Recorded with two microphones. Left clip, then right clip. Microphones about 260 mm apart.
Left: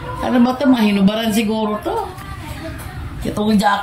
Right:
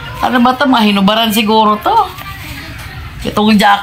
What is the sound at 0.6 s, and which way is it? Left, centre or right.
Speech, centre.